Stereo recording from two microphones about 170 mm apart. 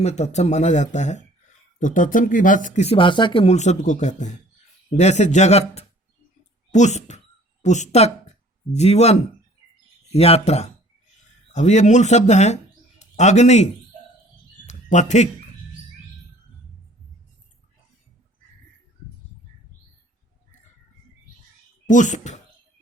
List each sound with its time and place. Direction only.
0.0 s speech: 40° left (ahead or behind)
14.7 s a sound: 45° left (ahead or behind)
21.8 s speech: 45° left (ahead or behind)